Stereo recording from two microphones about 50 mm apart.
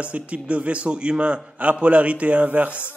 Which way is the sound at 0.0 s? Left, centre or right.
Right.